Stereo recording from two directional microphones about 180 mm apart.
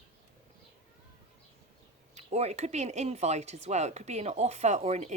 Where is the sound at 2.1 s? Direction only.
40° right (ahead or behind).